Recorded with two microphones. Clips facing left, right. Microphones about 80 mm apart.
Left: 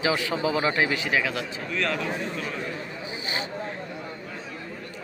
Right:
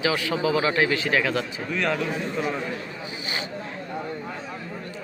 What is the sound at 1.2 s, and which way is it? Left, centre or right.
Speech, centre.